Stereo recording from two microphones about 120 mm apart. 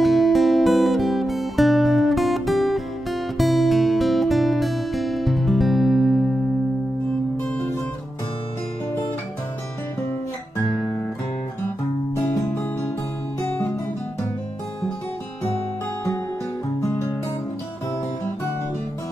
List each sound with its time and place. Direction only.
0.0 s music: centre (ahead or behind)
13.4 s music: 20° left (ahead or behind)